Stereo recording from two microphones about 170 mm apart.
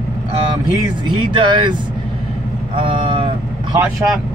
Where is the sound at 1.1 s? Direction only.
30° right (ahead or behind).